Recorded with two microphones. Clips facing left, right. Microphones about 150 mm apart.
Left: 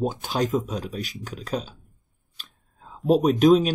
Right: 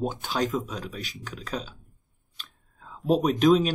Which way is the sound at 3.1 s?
45° left (ahead or behind).